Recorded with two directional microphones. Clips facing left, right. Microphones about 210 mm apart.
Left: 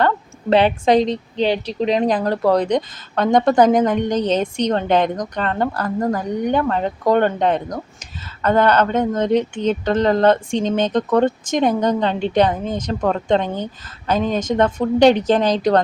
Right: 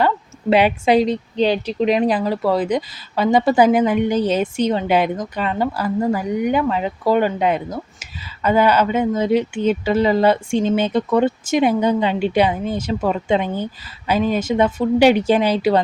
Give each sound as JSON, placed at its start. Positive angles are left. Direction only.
{"t": 0.5, "sound": "speech", "side_deg": -10}
{"t": 1.4, "sound": "speech", "side_deg": 25}
{"t": 2.0, "sound": "speech", "side_deg": -5}